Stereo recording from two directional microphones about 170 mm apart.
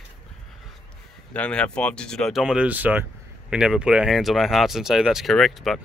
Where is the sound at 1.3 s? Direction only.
5° left (ahead or behind).